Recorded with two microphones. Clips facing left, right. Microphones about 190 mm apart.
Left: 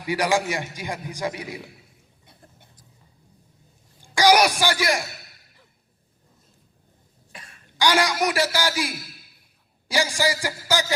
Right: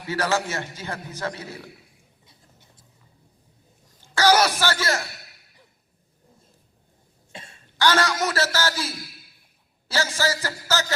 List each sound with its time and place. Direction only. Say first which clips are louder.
0.1 s a man's voice: left 2 dB; 15° left (ahead or behind)
2.2 s a sound: left 6 dB; 55° left (ahead or behind)
4.0 s speech: left 2 dB; 15° left (ahead or behind)
7.3 s cough: right 4 dB; 25° right (ahead or behind)
7.8 s a man's voice: left 1 dB; 15° left (ahead or behind)